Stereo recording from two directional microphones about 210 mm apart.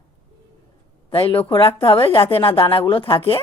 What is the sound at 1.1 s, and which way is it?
Speech, 25° left (ahead or behind).